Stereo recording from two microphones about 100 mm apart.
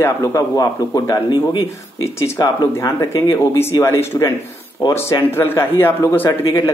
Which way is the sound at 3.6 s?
25° left (ahead or behind).